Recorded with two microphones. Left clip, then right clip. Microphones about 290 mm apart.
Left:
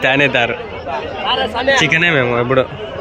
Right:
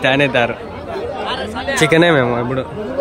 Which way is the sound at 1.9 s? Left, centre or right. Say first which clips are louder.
Right 1 dB; centre.